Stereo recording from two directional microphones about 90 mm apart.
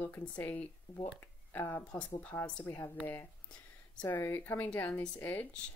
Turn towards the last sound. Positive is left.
turn(degrees=20)  # may be behind; listen again after turning